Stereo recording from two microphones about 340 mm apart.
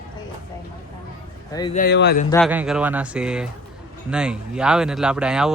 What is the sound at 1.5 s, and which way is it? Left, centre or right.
Speech, centre.